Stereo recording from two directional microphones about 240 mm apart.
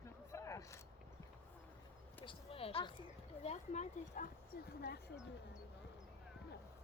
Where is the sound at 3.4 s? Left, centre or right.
Left.